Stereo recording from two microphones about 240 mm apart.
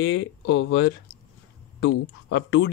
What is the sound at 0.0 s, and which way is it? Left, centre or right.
Speech, left.